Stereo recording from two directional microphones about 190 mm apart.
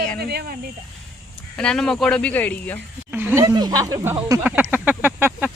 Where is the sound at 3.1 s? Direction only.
10° right (ahead or behind).